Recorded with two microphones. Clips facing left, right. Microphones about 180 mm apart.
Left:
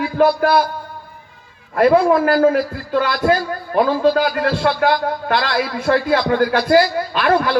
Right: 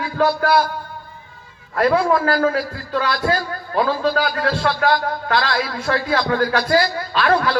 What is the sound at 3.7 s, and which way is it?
Speech, 20° left (ahead or behind).